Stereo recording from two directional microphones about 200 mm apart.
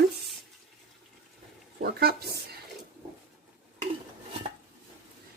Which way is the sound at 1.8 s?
50° right (ahead or behind).